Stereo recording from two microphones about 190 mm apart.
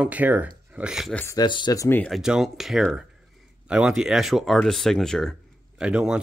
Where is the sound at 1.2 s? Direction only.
20° left (ahead or behind).